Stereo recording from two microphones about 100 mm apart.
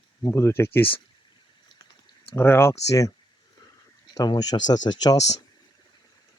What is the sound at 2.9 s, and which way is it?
Speech, 35° left (ahead or behind).